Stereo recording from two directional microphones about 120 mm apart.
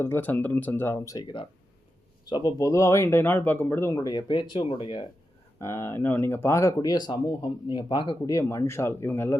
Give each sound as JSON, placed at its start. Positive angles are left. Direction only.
{"t": 0.0, "sound": "speech", "side_deg": 20}
{"t": 1.1, "sound": "speech", "side_deg": 40}
{"t": 2.6, "sound": "speech", "side_deg": 25}
{"t": 4.0, "sound": "speech", "side_deg": 35}
{"t": 5.5, "sound": "speech", "side_deg": 20}